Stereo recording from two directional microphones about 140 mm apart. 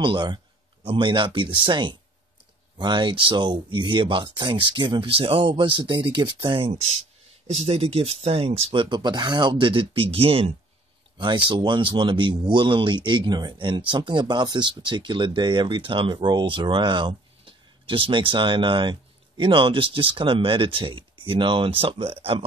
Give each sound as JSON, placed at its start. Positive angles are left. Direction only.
{"t": 0.0, "sound": "speech", "side_deg": -35}
{"t": 8.8, "sound": "speech", "side_deg": -30}